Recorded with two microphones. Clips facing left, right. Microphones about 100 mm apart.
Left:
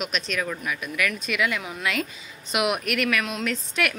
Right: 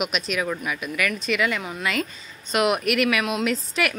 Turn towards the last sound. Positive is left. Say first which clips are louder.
# right 2 dB
turn(degrees=-5)  # may be behind; listen again after turning